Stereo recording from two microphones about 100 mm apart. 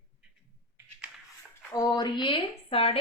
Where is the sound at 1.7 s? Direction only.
45° left (ahead or behind); by 2.9 s 75° left (ahead or behind).